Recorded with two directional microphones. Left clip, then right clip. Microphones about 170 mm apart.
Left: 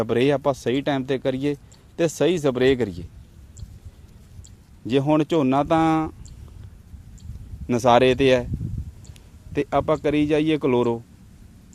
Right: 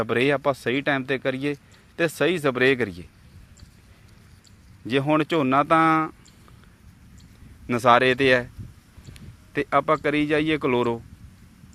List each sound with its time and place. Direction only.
0.0 s speech: 25° left (ahead or behind)
4.9 s speech: 25° left (ahead or behind)
7.7 s a man's voice: 25° left (ahead or behind)